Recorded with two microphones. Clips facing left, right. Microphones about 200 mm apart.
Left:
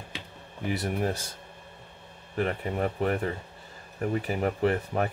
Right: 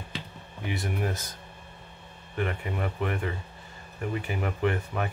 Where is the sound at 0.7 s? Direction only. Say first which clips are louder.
Left 3 dB; 40° left (ahead or behind).